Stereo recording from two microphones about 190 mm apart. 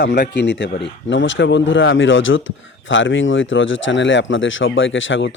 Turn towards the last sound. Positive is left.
turn(degrees=80)